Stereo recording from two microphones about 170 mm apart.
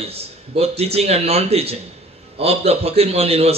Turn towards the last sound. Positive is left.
turn(degrees=-35)  # may be behind; listen again after turning